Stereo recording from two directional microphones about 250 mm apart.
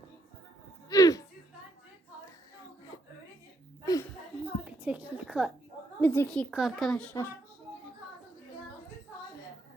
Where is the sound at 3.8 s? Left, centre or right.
Centre.